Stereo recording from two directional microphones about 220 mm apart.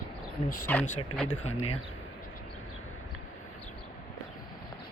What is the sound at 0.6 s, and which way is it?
Speech, 10° left (ahead or behind).